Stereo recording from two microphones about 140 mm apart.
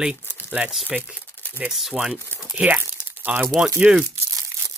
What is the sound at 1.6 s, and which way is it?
Speech, 5° right (ahead or behind).